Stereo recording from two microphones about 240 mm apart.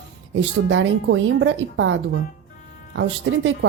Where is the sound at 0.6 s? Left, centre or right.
Right.